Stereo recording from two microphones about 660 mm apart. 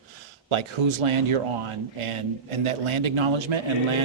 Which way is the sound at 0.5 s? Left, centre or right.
Right.